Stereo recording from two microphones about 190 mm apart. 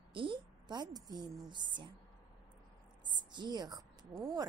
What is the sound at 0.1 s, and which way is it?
A woman's voice, 25° right (ahead or behind).